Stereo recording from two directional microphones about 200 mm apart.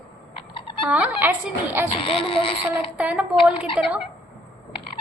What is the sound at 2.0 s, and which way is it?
Speech, 25° left (ahead or behind).